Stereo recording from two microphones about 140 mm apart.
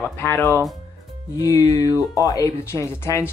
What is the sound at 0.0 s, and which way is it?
Speech, 15° left (ahead or behind).